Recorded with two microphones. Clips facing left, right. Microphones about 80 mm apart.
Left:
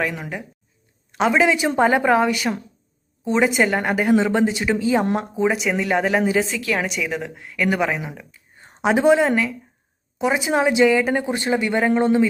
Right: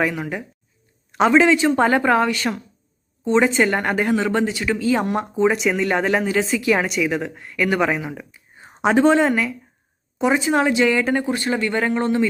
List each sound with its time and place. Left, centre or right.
0.0 s speech: centre
1.3 s speech: centre
4.1 s speech: centre
5.3 s speech: centre
6.6 s a woman's voice: centre
6.8 s speech: centre
8.8 s a woman's voice: centre
10.4 s speech: centre